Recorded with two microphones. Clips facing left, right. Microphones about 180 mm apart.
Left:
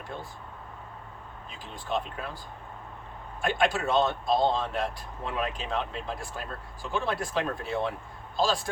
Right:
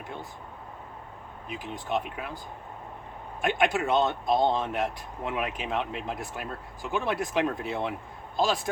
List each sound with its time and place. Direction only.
1.5 s speech: 20° right (ahead or behind)
3.4 s speech: 20° right (ahead or behind)